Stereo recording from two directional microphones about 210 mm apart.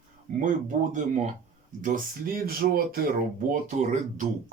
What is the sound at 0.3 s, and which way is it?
Speech, 40° right (ahead or behind).